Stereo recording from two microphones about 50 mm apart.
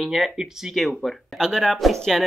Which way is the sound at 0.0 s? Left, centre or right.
Centre.